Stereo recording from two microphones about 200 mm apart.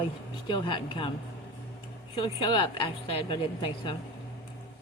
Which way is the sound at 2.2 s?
25° left (ahead or behind).